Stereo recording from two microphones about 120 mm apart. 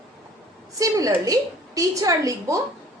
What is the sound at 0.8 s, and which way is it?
A woman's voice, 30° right (ahead or behind).